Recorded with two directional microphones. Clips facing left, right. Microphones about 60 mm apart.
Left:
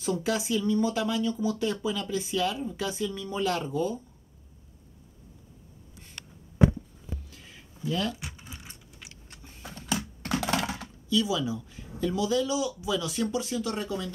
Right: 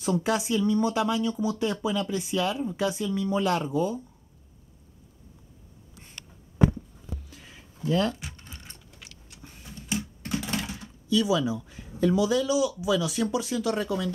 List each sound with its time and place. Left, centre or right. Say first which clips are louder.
0.0 s speech: right 3 dB; right
7.9 s speech: right 5 dB; right
8.2 s patter: left 1 dB; centre
9.3 s a sound: right 1 dB; left
9.8 s typing: left 1 dB; left
10.6 s dishes: left 4 dB; left
11.1 s speech: right 3 dB; right
13.5 s speech: right 4 dB; right